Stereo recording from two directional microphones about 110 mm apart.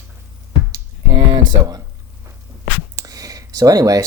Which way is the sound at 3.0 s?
35° right (ahead or behind).